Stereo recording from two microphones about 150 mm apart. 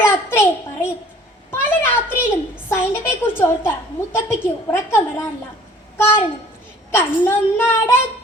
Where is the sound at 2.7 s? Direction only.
15° left (ahead or behind).